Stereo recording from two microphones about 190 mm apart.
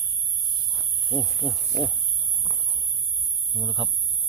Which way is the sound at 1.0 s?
5° right (ahead or behind).